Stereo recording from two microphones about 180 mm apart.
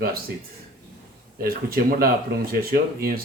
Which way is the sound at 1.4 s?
55° right (ahead or behind).